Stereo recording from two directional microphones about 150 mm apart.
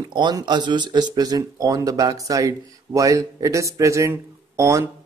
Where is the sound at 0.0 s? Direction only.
30° right (ahead or behind).